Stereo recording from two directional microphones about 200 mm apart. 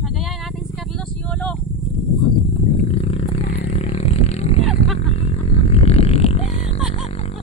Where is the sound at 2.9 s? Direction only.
30° left (ahead or behind).